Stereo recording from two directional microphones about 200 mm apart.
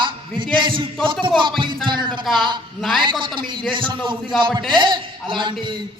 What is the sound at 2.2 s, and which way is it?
Speech, centre (ahead or behind).